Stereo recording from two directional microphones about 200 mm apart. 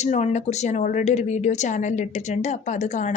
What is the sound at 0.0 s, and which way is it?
A woman's voice, 35° left (ahead or behind).